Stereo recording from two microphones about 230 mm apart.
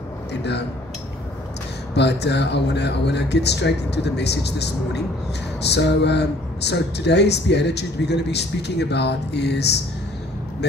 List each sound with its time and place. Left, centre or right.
0.3 s speech: left
2.0 s speech: left